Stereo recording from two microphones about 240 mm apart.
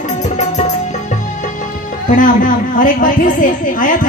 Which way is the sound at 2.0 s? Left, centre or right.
Left.